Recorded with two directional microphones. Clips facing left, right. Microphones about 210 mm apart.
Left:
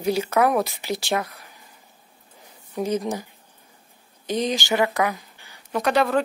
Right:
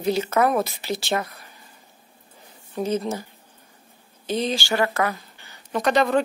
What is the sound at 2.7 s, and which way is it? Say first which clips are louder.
Speech: even; 15° left (ahead or behind).